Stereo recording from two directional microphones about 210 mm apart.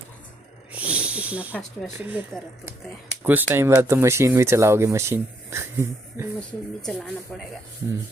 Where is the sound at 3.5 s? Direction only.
10° right (ahead or behind).